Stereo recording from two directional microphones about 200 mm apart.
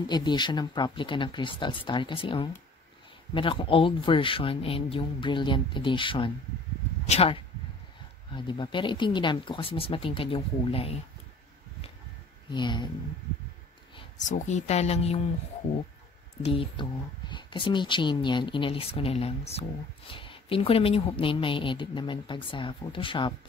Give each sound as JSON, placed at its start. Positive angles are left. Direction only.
{"t": 0.0, "sound": "a woman's voice", "side_deg": 20}
{"t": 12.4, "sound": "a woman's voice", "side_deg": 20}
{"t": 14.2, "sound": "speech", "side_deg": 35}
{"t": 16.4, "sound": "a woman's voice", "side_deg": 25}